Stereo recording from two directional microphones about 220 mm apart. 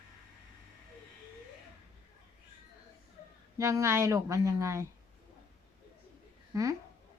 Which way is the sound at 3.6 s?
10° right (ahead or behind).